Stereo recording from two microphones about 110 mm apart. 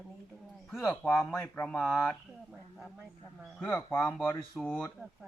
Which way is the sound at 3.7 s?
25° left (ahead or behind).